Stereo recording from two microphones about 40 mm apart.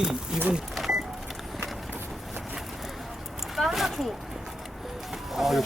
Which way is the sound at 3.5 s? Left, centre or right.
Centre.